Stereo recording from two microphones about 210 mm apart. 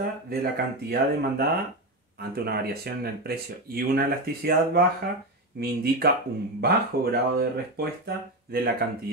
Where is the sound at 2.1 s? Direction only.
50° right (ahead or behind).